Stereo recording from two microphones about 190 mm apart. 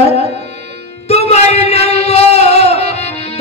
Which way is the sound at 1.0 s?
35° left (ahead or behind).